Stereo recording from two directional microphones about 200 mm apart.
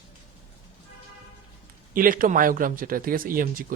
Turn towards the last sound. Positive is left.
turn(degrees=-45)  # may be behind; listen again after turning